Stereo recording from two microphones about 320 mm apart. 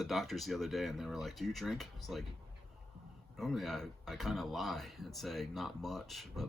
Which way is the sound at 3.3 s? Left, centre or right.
Centre.